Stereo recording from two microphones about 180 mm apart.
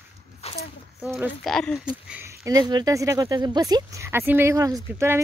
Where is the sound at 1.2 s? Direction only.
Centre (ahead or behind).